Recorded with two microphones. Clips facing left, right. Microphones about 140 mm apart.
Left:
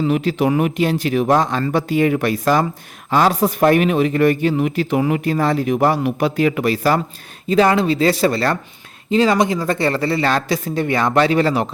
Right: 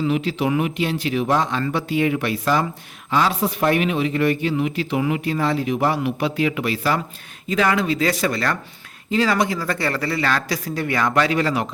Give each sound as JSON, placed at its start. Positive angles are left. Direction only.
{"t": 0.1, "sound": "speech", "side_deg": 45}